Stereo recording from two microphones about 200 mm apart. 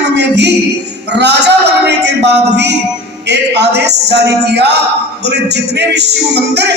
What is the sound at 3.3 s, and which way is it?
A man's voice, 55° right (ahead or behind).